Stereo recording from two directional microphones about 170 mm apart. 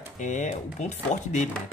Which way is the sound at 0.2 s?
45° left (ahead or behind).